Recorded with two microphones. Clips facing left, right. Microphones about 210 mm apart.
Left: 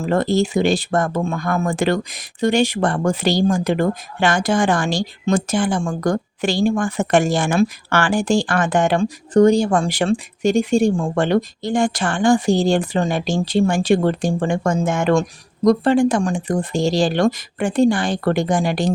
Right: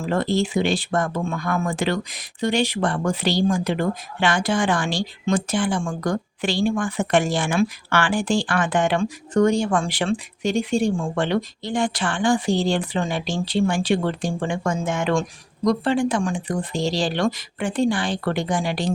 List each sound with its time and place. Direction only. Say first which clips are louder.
0.0 s speech: left 4 dB; 45° left (ahead or behind)